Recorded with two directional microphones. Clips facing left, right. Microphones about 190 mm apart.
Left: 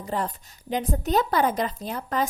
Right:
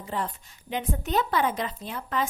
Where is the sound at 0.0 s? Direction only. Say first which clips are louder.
Left 3 dB; 40° left (ahead or behind).